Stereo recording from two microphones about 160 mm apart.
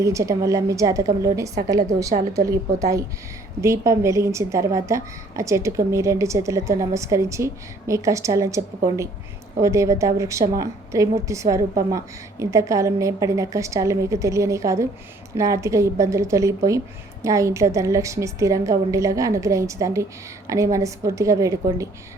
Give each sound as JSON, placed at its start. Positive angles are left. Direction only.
{"t": 0.0, "sound": "a woman's voice", "side_deg": -20}